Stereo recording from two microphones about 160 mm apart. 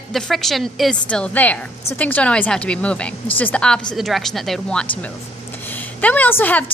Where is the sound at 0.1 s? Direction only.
Centre (ahead or behind).